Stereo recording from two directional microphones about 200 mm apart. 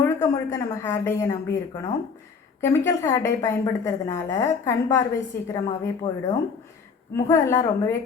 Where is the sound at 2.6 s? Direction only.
15° left (ahead or behind).